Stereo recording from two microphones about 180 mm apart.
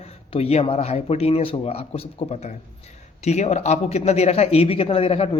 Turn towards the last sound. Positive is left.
turn(degrees=30)  # may be behind; listen again after turning